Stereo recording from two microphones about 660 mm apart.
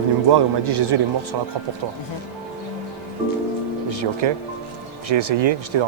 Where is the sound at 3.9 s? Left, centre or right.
Right.